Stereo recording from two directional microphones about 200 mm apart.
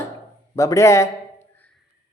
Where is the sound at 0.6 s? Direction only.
15° left (ahead or behind).